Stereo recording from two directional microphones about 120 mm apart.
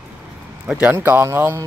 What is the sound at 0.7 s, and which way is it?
Speech, 10° right (ahead or behind).